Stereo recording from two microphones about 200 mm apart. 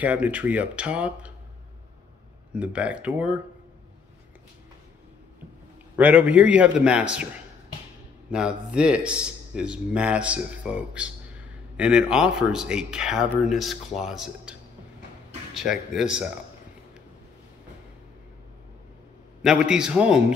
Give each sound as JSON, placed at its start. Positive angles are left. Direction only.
{"t": 0.0, "sound": "speech", "side_deg": -5}
{"t": 2.5, "sound": "a man's voice", "side_deg": -5}
{"t": 5.9, "sound": "speech", "side_deg": -5}
{"t": 8.3, "sound": "a man's voice", "side_deg": -5}
{"t": 15.5, "sound": "a man's voice", "side_deg": 0}
{"t": 19.4, "sound": "a man's voice", "side_deg": -5}